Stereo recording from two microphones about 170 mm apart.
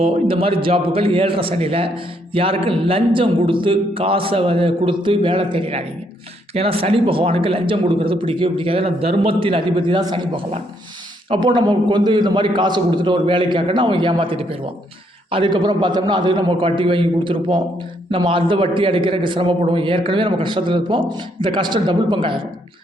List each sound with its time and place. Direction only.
0.0 s a man's voice: 35° right (ahead or behind)